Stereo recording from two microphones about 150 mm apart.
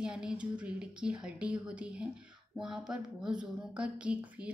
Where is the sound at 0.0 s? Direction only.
5° right (ahead or behind).